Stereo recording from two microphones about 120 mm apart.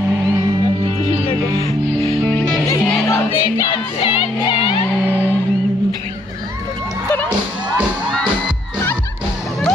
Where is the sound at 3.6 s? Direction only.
45° left (ahead or behind).